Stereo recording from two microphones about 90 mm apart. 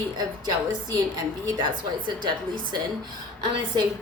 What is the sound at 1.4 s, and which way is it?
Speech, 55° right (ahead or behind).